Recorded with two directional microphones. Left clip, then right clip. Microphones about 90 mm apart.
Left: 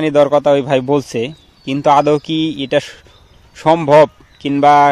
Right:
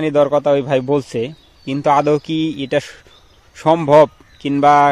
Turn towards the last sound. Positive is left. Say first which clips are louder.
# left 2 dB
turn(degrees=20)  # may be behind; listen again after turning